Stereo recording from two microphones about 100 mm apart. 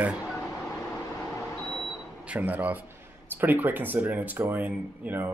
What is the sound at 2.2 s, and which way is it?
Speech, 15° right (ahead or behind).